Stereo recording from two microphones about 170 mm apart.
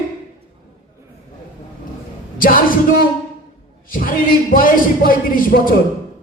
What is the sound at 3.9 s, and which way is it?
A man's voice, 55° left (ahead or behind).